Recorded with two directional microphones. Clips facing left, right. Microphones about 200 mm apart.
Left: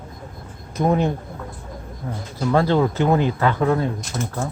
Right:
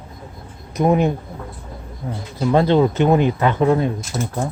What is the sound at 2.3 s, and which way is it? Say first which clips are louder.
Speech: right 3 dB; 20° right (ahead or behind).